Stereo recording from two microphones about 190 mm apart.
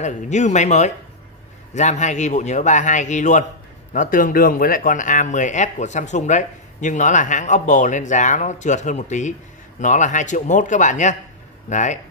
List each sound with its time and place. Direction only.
0.0 s speech: 40° left (ahead or behind)